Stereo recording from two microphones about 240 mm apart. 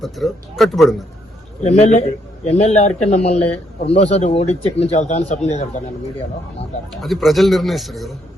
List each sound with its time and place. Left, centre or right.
0.0 s a man's voice: centre
1.6 s speech: left
7.0 s a man's voice: centre